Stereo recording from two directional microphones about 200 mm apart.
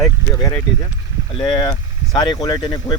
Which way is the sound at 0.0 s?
15° left (ahead or behind).